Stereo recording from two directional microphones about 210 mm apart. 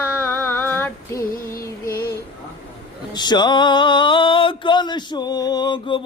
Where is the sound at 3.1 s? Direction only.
20° left (ahead or behind).